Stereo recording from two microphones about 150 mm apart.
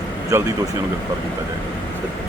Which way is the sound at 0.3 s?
15° right (ahead or behind).